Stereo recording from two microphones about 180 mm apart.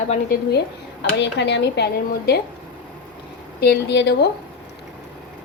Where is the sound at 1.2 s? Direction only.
75° left (ahead or behind).